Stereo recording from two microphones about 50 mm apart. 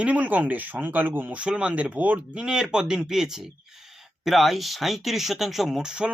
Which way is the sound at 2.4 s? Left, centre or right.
Centre.